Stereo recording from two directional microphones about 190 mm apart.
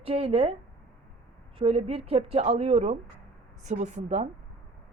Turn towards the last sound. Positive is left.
turn(degrees=-40)  # may be behind; listen again after turning